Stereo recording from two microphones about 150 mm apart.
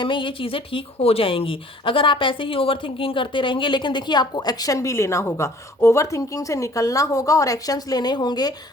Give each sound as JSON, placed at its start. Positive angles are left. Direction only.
{"t": 0.0, "sound": "speech", "side_deg": 35}